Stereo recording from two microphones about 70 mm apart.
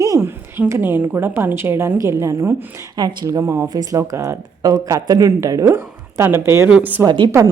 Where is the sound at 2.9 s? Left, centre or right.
Right.